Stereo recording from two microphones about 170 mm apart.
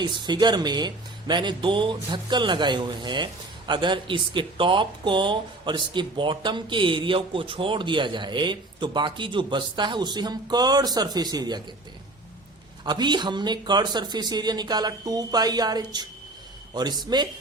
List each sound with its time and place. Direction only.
0.0 s speech: 25° right (ahead or behind)
12.8 s speech: 25° right (ahead or behind)